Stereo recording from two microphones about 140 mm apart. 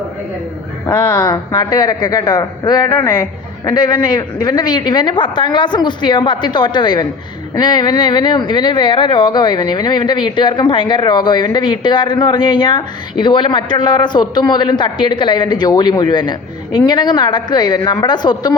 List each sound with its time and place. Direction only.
1.1 s a woman's voice: 30° left (ahead or behind)